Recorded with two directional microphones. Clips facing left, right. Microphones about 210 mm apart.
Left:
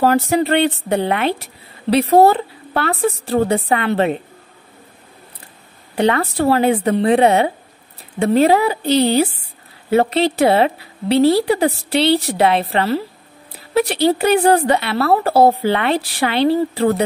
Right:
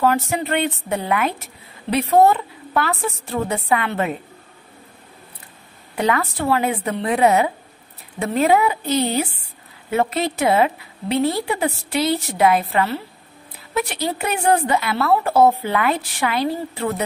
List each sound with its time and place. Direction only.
0.0 s a woman's voice: 35° left (ahead or behind)
5.9 s a woman's voice: 30° left (ahead or behind)